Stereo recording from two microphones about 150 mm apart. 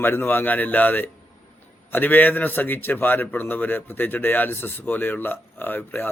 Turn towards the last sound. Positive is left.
turn(degrees=15)  # may be behind; listen again after turning